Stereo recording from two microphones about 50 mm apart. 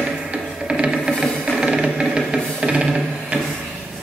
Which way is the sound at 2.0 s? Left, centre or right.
Centre.